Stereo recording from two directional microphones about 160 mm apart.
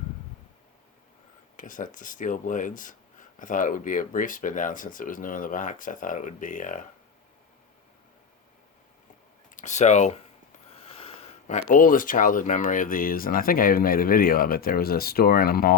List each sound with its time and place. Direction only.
1.5 s speech: 55° left (ahead or behind)
9.6 s speech: 50° left (ahead or behind); by 15.7 s 70° left (ahead or behind)